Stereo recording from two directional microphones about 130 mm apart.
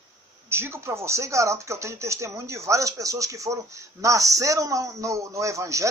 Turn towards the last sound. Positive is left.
turn(degrees=-25)  # may be behind; listen again after turning